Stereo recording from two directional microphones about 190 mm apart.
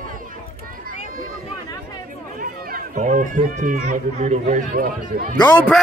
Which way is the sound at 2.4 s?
45° right (ahead or behind).